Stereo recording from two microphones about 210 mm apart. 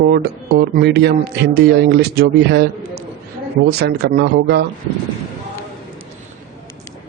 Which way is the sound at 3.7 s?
50° right (ahead or behind).